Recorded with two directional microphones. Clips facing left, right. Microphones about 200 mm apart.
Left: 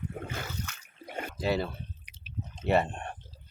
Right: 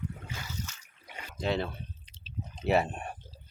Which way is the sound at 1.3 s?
5° left (ahead or behind).